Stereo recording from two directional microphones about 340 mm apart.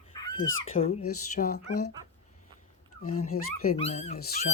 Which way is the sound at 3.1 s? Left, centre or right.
Left.